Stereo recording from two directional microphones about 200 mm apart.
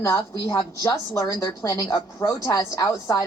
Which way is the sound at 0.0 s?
15° left (ahead or behind).